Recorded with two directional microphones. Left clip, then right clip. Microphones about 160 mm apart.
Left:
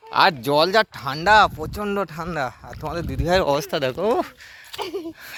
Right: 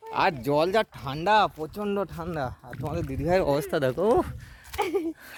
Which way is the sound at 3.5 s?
20° right (ahead or behind).